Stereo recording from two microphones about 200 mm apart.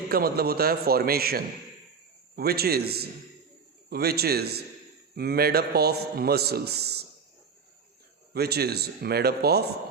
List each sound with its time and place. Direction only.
0.1 s a man's voice: 50° right (ahead or behind)
8.3 s a man's voice: 55° right (ahead or behind)